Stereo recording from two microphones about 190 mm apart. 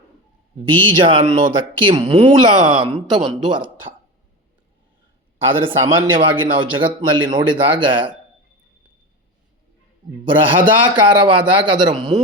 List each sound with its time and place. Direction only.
0.7 s speech: 25° right (ahead or behind)
3.2 s speech: 25° right (ahead or behind)
5.5 s speech: 25° right (ahead or behind)
10.2 s speech: 25° right (ahead or behind)